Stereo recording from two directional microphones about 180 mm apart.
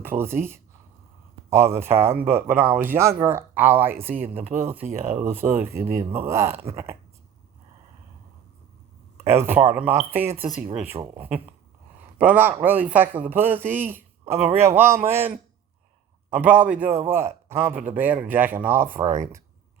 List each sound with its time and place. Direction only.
0.0 s speech: 10° right (ahead or behind)
9.1 s speech: 15° right (ahead or behind)